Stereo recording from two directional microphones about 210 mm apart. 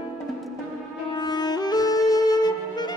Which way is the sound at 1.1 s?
20° left (ahead or behind).